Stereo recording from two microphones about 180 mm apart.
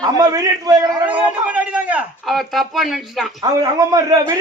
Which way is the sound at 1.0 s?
10° right (ahead or behind).